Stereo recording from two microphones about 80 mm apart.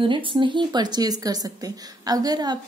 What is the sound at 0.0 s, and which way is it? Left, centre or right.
Speech, right.